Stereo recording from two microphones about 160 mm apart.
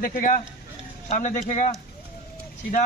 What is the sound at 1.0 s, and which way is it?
Speech, 50° left (ahead or behind).